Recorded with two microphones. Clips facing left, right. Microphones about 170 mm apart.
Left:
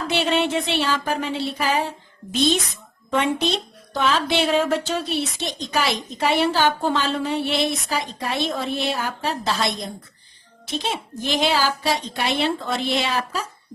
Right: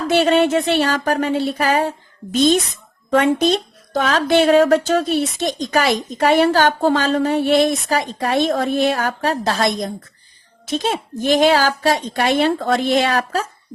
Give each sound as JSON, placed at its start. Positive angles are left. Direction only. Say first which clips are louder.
{"t": 0.1, "sound": "speech", "louder": "right 7 dB", "side_deg": -45}